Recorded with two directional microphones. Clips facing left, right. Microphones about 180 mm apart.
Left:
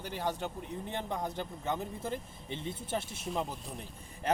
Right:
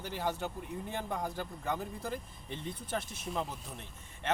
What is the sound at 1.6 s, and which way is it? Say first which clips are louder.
Speech: left 1 dB; centre (ahead or behind).